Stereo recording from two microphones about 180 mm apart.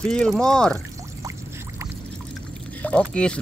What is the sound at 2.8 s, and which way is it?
Speech, 5° left (ahead or behind).